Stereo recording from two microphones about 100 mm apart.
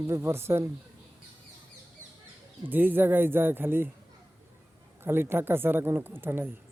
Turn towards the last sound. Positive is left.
turn(degrees=-20)  # may be behind; listen again after turning